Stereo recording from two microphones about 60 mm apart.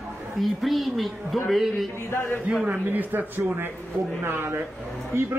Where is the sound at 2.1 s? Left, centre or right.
Left.